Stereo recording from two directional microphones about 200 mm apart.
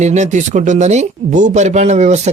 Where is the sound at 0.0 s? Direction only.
35° right (ahead or behind).